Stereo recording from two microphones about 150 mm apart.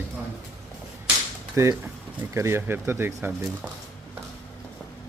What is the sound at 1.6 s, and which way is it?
A man's voice, 20° right (ahead or behind).